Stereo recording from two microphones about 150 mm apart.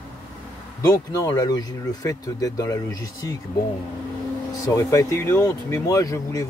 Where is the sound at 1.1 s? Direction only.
25° left (ahead or behind).